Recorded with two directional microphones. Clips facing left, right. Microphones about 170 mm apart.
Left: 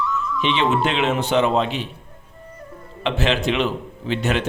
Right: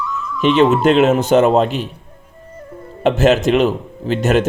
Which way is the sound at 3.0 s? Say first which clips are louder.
Right 8 dB; 45° right (ahead or behind).